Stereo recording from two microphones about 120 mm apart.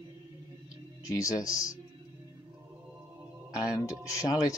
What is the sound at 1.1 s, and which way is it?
Speech, 30° left (ahead or behind).